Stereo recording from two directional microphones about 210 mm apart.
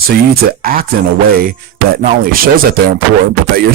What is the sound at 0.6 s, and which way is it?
Speech, 45° right (ahead or behind).